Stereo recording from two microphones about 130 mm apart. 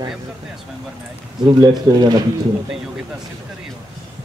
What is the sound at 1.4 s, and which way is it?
Speech, 30° right (ahead or behind).